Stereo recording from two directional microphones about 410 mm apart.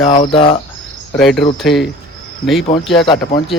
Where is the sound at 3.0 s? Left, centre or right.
Centre.